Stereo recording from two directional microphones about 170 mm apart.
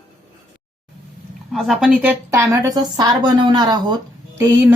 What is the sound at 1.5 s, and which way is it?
A woman's voice, centre (ahead or behind).